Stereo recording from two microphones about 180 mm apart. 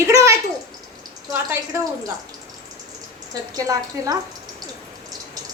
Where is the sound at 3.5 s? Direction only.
20° right (ahead or behind).